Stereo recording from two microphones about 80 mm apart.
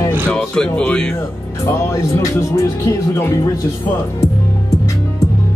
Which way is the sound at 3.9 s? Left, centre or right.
Left.